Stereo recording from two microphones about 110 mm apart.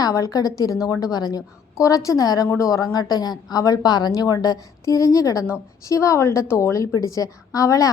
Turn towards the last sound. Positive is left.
turn(degrees=30)  # may be behind; listen again after turning